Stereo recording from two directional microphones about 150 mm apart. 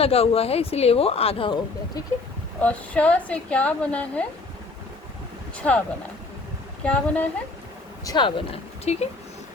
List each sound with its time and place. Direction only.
0.0 s speech: 40° left (ahead or behind)
2.6 s a woman's voice: 10° left (ahead or behind)
5.5 s a woman's voice: 10° left (ahead or behind)
6.8 s a woman's voice: 10° left (ahead or behind)
8.0 s speech: 30° left (ahead or behind)